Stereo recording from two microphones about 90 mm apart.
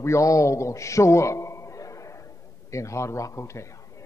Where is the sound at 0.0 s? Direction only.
35° left (ahead or behind).